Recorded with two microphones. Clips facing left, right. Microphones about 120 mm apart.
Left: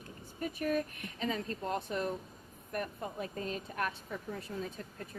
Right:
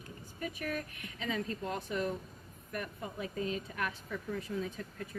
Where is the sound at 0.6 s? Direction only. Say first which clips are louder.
Left 8 dB; 40° left (ahead or behind).